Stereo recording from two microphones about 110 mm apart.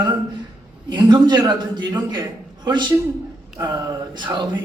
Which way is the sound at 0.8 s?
40° right (ahead or behind).